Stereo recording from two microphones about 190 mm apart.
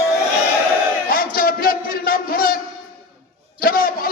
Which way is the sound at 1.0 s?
50° left (ahead or behind).